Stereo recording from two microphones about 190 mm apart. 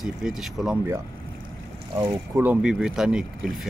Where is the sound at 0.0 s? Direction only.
Centre (ahead or behind).